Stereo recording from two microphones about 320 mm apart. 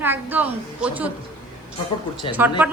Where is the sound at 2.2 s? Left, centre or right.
Centre.